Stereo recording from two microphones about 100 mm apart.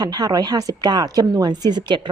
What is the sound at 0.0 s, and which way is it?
A woman's voice, 45° right (ahead or behind).